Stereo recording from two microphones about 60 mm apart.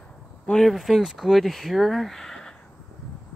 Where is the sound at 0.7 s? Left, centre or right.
Centre.